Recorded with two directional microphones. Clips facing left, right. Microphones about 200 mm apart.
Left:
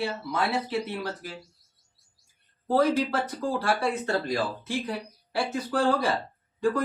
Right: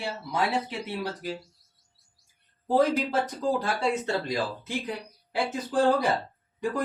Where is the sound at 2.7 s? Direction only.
20° right (ahead or behind).